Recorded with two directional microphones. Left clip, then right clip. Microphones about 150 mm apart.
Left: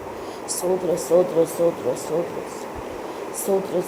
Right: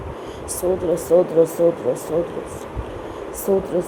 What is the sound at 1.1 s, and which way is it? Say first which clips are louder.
Speech: right 2 dB; 45° right (ahead or behind).